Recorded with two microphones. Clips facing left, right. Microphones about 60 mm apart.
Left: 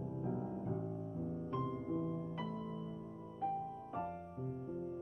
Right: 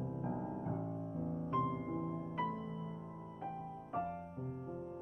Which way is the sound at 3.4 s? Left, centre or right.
Right.